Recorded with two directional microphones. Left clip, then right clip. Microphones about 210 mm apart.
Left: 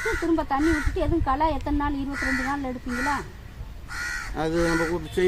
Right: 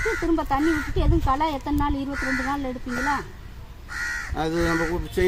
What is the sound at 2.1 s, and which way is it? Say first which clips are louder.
Speech: even; 40° left (ahead or behind).